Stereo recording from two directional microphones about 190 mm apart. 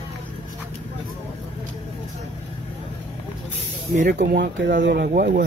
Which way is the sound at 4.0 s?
45° right (ahead or behind).